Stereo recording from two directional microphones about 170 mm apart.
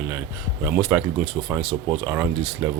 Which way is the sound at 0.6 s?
10° right (ahead or behind).